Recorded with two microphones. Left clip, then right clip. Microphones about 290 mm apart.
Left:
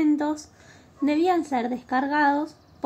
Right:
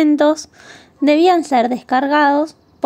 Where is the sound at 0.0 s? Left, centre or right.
Right.